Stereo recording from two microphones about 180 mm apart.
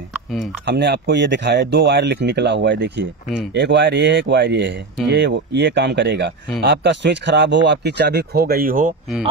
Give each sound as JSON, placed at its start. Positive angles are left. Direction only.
{"t": 0.7, "sound": "speech", "side_deg": -70}